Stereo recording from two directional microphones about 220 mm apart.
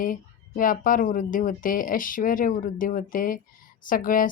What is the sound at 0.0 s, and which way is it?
Speech, 40° left (ahead or behind).